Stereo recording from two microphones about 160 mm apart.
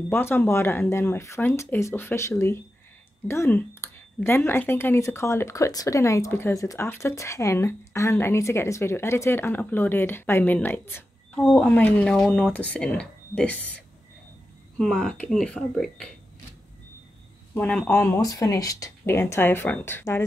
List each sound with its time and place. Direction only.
0.1 s speech: 15° left (ahead or behind)
14.8 s speech: 5° left (ahead or behind)
17.6 s speech: 5° left (ahead or behind)